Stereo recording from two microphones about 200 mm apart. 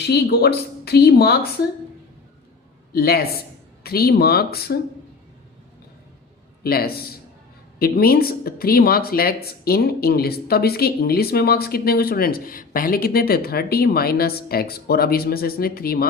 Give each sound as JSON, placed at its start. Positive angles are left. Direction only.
{"t": 0.1, "sound": "speech", "side_deg": 55}
{"t": 2.9, "sound": "speech", "side_deg": 50}
{"t": 6.6, "sound": "a man's voice", "side_deg": 50}